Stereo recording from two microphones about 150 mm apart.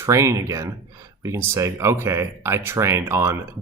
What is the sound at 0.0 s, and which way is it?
Speech, 20° right (ahead or behind).